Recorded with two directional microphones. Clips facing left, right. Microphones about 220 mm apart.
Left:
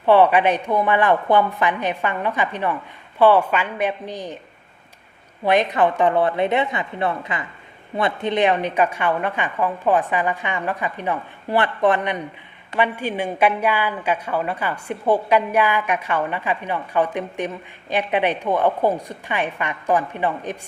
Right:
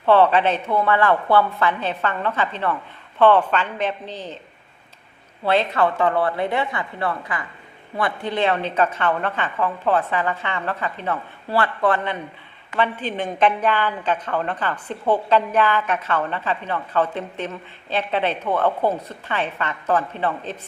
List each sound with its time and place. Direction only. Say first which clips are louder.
0.0 s a woman's voice: left 1 dB; 15° left (ahead or behind)
5.4 s a woman's voice: left 2 dB; 15° left (ahead or behind)